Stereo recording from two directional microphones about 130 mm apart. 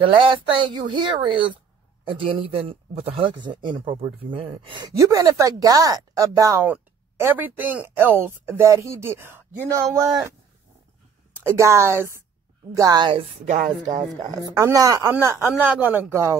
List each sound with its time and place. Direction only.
0.0 s speech: 40° right (ahead or behind)
4.2 s speech: 45° right (ahead or behind)
4.8 s speech: 25° right (ahead or behind)
11.3 s speech: 20° right (ahead or behind)
13.1 s speech: 50° right (ahead or behind)
14.3 s speech: 25° right (ahead or behind)